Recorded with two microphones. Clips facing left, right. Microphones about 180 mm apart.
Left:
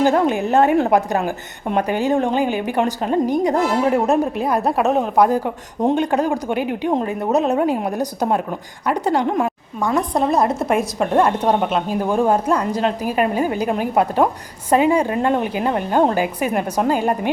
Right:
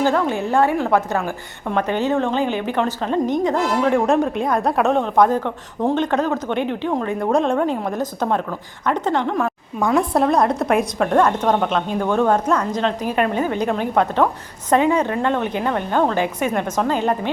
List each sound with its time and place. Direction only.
0.0 s a woman's voice: 20° left (ahead or behind)
9.8 s a woman's voice: 10° right (ahead or behind)
10.2 s a woman's voice: 5° left (ahead or behind)